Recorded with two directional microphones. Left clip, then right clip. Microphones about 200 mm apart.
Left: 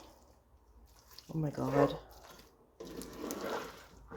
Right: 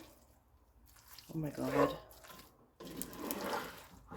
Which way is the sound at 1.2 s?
25° left (ahead or behind).